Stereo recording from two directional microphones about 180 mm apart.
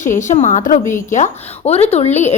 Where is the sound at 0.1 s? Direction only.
45° left (ahead or behind).